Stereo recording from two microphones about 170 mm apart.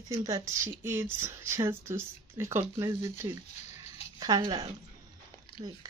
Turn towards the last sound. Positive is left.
turn(degrees=-30)  # may be behind; listen again after turning